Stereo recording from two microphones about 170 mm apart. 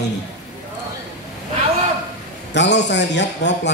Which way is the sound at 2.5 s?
90° left.